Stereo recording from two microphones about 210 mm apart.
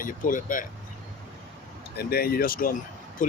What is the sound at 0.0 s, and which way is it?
Speech, 40° left (ahead or behind).